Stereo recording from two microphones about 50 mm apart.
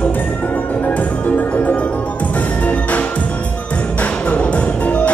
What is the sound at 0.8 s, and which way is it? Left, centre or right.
Music, left.